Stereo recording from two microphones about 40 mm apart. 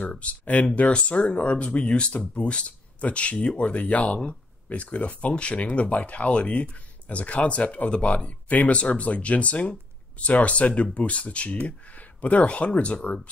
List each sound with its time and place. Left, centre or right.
0.1 s speech: left